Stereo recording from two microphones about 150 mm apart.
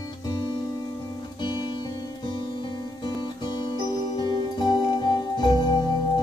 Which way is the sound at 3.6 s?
30° left (ahead or behind).